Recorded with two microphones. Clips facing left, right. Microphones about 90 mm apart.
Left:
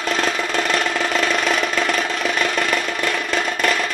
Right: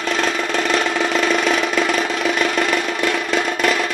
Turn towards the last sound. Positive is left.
turn(degrees=0)  # may be behind; listen again after turning